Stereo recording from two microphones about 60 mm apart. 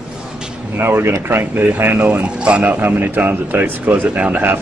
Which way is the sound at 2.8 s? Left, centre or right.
Right.